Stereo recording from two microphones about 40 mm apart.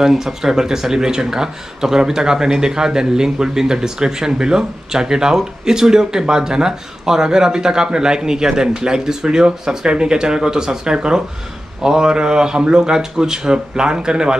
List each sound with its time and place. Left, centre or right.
0.0 s a man's voice: centre